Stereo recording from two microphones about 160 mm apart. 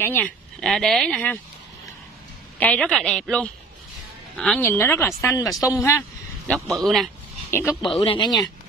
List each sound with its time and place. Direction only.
0.0 s speech: 10° left (ahead or behind)
2.6 s a woman's voice: 5° left (ahead or behind)
4.6 s speech: 15° left (ahead or behind)
6.5 s a woman's voice: centre (ahead or behind)
7.5 s speech: 15° left (ahead or behind)
8.0 s speech: 30° left (ahead or behind)